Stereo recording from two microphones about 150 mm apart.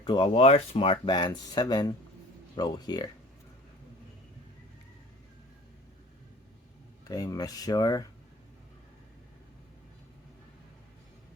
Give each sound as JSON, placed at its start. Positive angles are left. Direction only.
{"t": 0.0, "sound": "speech", "side_deg": 35}
{"t": 7.1, "sound": "speech", "side_deg": 25}